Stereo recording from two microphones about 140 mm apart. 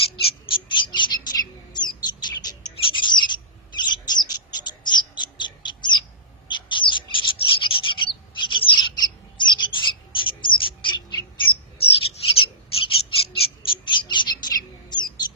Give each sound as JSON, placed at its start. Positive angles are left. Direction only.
{"t": 0.2, "sound": "bird", "side_deg": 40}